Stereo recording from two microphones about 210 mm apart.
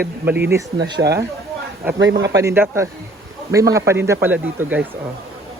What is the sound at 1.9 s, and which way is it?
Speech, 60° right (ahead or behind).